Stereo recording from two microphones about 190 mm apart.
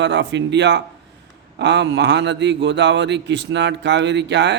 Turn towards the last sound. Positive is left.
turn(degrees=-65)  # may be behind; listen again after turning